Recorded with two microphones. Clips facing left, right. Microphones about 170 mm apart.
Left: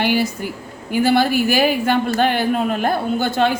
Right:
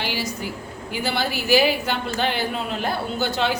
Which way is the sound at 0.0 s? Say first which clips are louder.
Left 8 dB; 55° left (ahead or behind).